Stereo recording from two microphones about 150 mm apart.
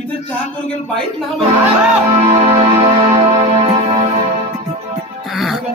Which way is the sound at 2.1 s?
45° right (ahead or behind).